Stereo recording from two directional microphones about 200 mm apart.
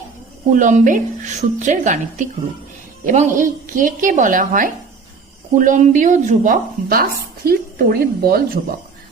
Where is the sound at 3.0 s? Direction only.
40° right (ahead or behind).